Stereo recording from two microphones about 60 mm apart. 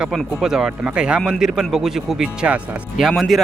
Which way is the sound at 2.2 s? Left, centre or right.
Centre.